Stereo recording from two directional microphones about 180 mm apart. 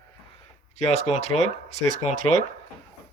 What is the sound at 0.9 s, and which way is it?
Speech, 40° left (ahead or behind).